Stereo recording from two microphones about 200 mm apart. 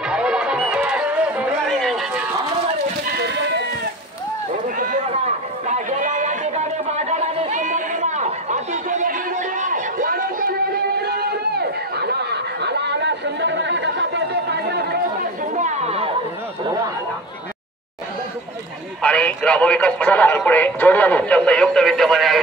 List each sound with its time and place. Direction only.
0.1 s music: 5° right (ahead or behind)
3.1 s a sound: 55° right (ahead or behind)
4.7 s run: 40° right (ahead or behind)
9.6 s a sound: 40° right (ahead or behind)
11.0 s chatter: 55° right (ahead or behind)
15.5 s chatter: 35° right (ahead or behind)
18.9 s speech: 5° left (ahead or behind)